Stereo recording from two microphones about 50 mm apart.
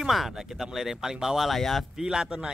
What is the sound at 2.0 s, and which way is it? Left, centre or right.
Speech, centre.